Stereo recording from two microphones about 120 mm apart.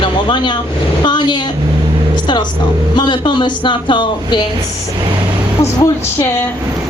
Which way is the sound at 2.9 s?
40° left (ahead or behind).